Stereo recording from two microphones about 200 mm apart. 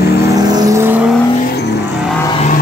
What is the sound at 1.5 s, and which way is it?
Vehicle, 55° left (ahead or behind).